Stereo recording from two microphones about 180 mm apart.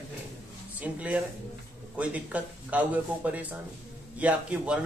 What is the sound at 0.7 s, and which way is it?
Speech, 10° right (ahead or behind).